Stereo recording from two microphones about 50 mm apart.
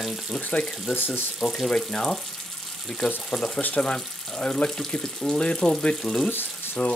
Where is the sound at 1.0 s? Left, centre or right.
Left.